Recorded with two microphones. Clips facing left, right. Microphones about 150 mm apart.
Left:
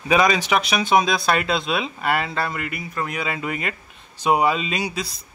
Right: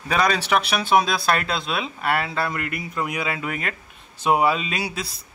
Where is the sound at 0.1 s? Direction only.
10° left (ahead or behind).